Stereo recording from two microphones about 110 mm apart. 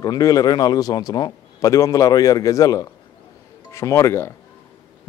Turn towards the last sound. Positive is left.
turn(degrees=25)  # may be behind; listen again after turning